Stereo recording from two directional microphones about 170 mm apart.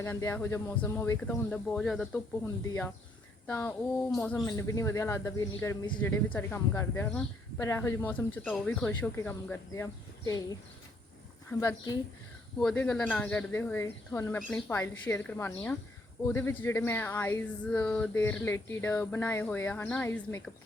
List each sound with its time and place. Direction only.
0.0 s speech: 15° left (ahead or behind)
1.7 s speech: 5° left (ahead or behind)
4.5 s speech: 15° left (ahead or behind)
6.0 s a woman's voice: 10° left (ahead or behind)
12.5 s speech: 5° left (ahead or behind)